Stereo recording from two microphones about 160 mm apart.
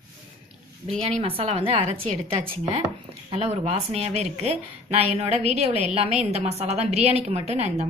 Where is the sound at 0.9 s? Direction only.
40° right (ahead or behind).